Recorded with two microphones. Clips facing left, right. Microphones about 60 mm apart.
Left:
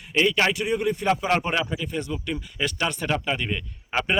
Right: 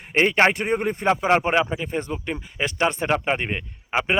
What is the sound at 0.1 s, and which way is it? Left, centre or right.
Speech, right.